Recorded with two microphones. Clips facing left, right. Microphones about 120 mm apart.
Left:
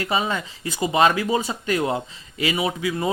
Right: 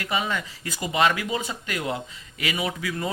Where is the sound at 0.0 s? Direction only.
30° left (ahead or behind).